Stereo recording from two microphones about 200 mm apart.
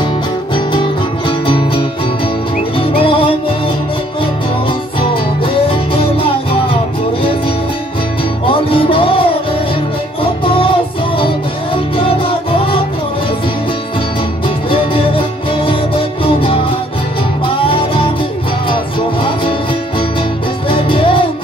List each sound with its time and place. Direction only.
0.7 s music: 25° left (ahead or behind)
2.8 s music: 25° left (ahead or behind)
5.7 s music: 25° left (ahead or behind)
8.5 s music: 25° left (ahead or behind)
10.4 s music: 25° left (ahead or behind)
11.7 s music: 25° left (ahead or behind)
14.7 s music: 25° left (ahead or behind)
17.6 s music: 25° left (ahead or behind)
20.7 s music: 25° left (ahead or behind)